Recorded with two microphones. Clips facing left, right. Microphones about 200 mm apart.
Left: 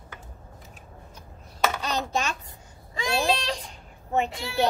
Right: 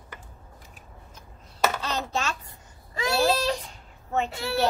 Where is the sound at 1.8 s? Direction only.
15° left (ahead or behind).